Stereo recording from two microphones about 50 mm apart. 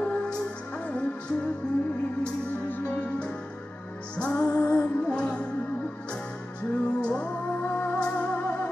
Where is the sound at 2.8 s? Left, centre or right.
Left.